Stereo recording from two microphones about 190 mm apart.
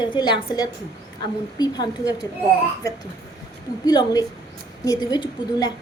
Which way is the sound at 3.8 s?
20° left (ahead or behind).